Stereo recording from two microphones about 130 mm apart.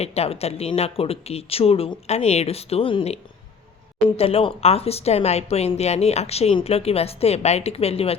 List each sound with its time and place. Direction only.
0.0 s speech: 50° left (ahead or behind)
4.2 s speech: 45° left (ahead or behind)